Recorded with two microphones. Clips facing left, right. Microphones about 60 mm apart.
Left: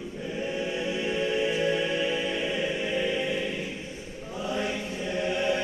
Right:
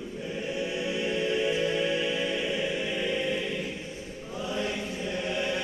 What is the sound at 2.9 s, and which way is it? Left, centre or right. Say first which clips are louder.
Choir: left 1 dB; centre.